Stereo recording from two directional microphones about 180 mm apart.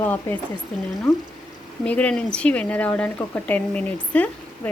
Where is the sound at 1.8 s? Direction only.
5° left (ahead or behind).